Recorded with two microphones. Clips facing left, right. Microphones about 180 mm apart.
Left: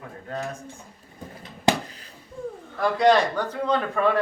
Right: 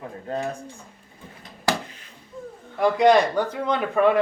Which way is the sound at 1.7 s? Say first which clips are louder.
Left 3 dB; 20° left (ahead or behind).